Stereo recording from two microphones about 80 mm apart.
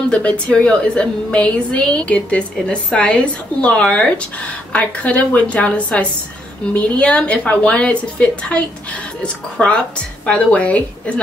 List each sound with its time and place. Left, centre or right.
0.1 s a woman's voice: centre